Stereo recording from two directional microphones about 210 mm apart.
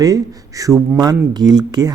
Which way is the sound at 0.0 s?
15° right (ahead or behind).